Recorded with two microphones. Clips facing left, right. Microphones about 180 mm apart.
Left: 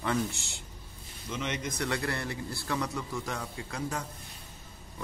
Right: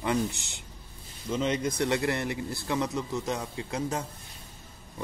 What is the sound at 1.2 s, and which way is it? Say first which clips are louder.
A man's voice: right 7 dB; 30° right (ahead or behind).